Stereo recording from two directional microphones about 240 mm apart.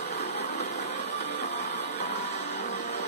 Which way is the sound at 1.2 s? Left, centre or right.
Left.